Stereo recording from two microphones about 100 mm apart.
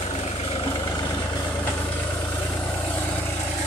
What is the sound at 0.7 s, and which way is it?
Vehicle, 40° left (ahead or behind).